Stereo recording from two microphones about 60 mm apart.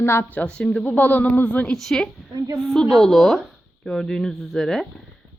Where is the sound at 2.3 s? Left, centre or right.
Right.